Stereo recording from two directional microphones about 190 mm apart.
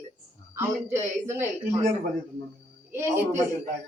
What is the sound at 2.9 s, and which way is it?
Speech, 15° right (ahead or behind).